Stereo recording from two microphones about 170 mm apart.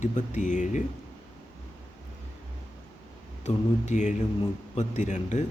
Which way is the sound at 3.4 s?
45° left (ahead or behind).